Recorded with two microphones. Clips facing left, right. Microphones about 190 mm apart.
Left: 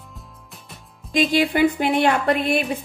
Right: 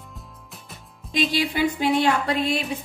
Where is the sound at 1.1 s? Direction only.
50° left (ahead or behind).